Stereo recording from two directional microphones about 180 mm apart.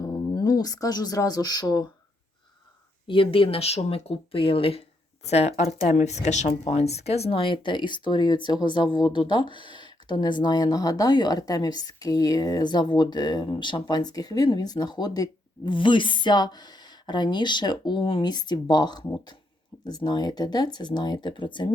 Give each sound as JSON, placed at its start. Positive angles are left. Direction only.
{"t": 0.0, "sound": "speech", "side_deg": 20}
{"t": 3.1, "sound": "speech", "side_deg": 30}